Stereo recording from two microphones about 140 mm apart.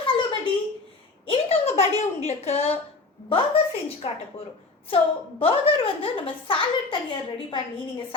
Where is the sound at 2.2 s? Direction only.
50° left (ahead or behind).